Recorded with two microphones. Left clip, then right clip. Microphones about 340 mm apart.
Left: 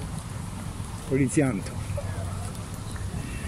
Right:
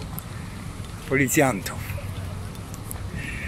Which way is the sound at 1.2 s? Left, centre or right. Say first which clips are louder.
Right 5 dB; centre.